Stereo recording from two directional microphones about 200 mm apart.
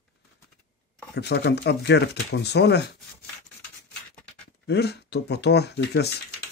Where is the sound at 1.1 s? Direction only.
55° left (ahead or behind).